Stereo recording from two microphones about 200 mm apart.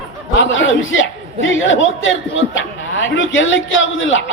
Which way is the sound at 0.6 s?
70° left (ahead or behind).